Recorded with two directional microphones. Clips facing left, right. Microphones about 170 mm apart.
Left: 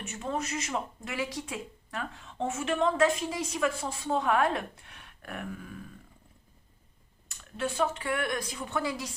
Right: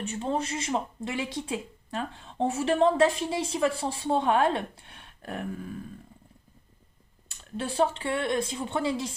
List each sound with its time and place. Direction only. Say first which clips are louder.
0.0 s speech: right 4 dB; 30° right (ahead or behind)
7.3 s speech: even; 30° right (ahead or behind)